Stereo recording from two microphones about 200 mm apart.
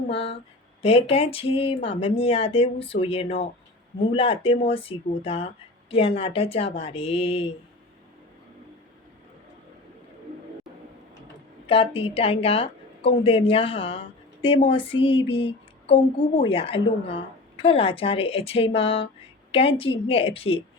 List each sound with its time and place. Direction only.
0.1 s a woman's voice: 30° left (ahead or behind)
11.6 s a woman's voice: 25° left (ahead or behind)